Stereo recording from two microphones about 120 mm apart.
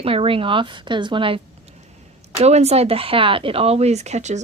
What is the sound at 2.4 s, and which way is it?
Speech, 65° right (ahead or behind).